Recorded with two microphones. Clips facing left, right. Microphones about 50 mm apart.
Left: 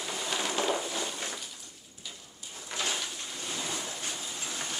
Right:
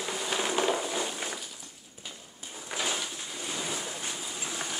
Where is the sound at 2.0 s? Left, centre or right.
Right.